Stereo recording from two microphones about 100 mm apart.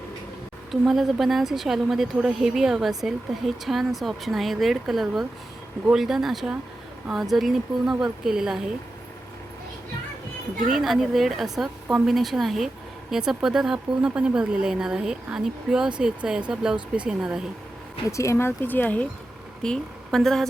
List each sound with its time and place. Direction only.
0.7 s speech: centre (ahead or behind)
10.7 s speech: 5° right (ahead or behind)
18.2 s speech: 25° left (ahead or behind)
19.6 s a woman's voice: 5° left (ahead or behind)